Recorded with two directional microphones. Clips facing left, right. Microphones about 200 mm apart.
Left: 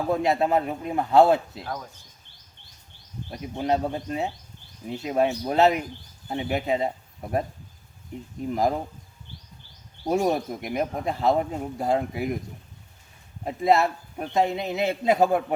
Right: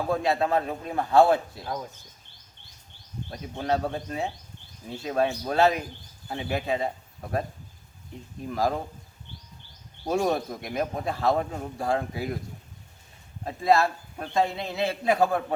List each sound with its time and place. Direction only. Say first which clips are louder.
0.1 s speech: left 2 dB; 20° left (ahead or behind)
3.5 s speech: left 2 dB; 15° left (ahead or behind)
8.5 s speech: left 2 dB; 20° left (ahead or behind)
10.1 s speech: left 2 dB; 15° left (ahead or behind)
13.4 s speech: left 1 dB; 20° left (ahead or behind)